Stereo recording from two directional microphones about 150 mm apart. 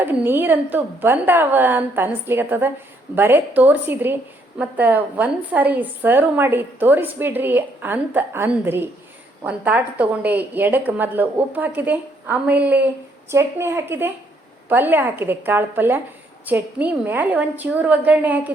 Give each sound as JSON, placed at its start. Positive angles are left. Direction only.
{"t": 0.0, "sound": "a woman's voice", "side_deg": -10}